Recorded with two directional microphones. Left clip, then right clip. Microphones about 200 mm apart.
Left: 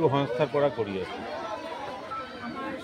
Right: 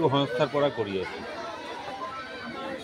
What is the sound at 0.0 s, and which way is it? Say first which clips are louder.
Speech: even; 30° right (ahead or behind).